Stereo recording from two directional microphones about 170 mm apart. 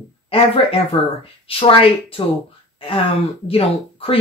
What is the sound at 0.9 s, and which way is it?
Speech, 35° left (ahead or behind).